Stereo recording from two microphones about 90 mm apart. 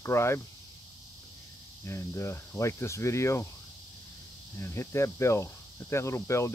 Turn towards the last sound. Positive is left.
turn(degrees=30)  # may be behind; listen again after turning